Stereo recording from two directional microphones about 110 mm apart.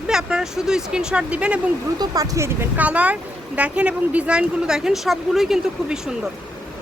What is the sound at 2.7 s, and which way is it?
Speech, 15° right (ahead or behind).